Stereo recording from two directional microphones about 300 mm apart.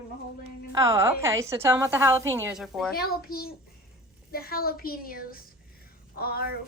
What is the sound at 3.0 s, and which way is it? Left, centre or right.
A child's voice, left.